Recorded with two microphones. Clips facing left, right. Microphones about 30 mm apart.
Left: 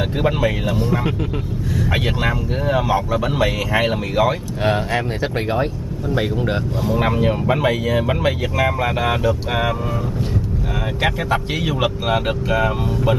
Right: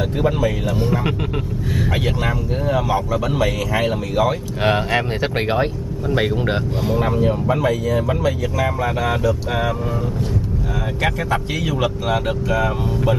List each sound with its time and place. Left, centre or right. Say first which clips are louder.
0.2 s speech: even; left
2.2 s speech: left 1 dB; centre
4.6 s speech: right 1 dB; centre
6.1 s speech: right 1 dB; centre
7.0 s speech: left 1 dB; left
11.0 s speech: left 1 dB; centre